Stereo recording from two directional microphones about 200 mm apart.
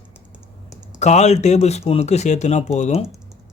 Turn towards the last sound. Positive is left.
turn(degrees=30)  # may be behind; listen again after turning